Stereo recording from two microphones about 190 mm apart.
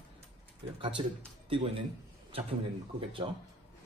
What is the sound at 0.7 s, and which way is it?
Speech, 25° right (ahead or behind).